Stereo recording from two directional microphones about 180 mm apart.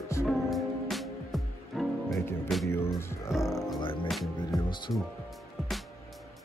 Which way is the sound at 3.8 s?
30° left (ahead or behind).